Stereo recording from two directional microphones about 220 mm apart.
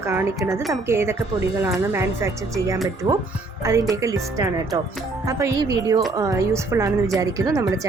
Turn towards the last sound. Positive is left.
turn(degrees=-15)  # may be behind; listen again after turning